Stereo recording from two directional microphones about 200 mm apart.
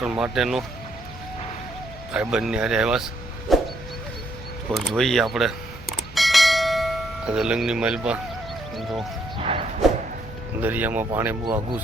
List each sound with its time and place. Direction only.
0.0 s speech: 5° right (ahead or behind)
2.1 s speech: 5° right (ahead or behind)
3.5 s a sound: centre (ahead or behind)
4.7 s speech: centre (ahead or behind)
6.1 s bell: centre (ahead or behind)
8.7 s speech: centre (ahead or behind)
9.4 s a sound: 30° right (ahead or behind)
10.6 s speech: 10° right (ahead or behind)